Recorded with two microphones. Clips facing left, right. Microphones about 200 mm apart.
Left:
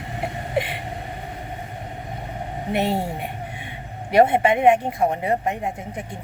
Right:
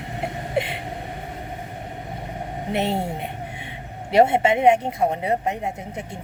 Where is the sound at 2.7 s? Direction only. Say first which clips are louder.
Left 1 dB; 25° right (ahead or behind).